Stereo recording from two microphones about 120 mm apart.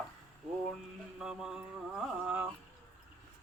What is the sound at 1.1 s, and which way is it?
A man's voice, 5° right (ahead or behind).